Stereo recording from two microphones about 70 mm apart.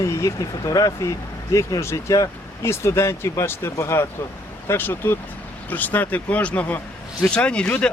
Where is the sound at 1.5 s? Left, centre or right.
Left.